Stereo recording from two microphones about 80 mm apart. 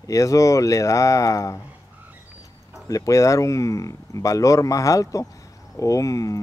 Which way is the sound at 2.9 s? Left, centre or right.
Left.